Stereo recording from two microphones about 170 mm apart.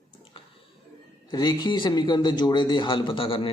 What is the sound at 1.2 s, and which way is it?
A man's voice, 25° left (ahead or behind).